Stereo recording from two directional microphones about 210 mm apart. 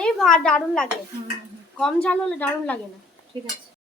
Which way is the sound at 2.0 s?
5° left (ahead or behind).